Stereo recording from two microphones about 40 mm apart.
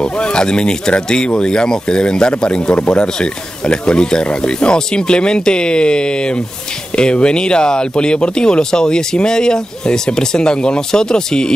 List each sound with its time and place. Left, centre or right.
0.0 s speech: left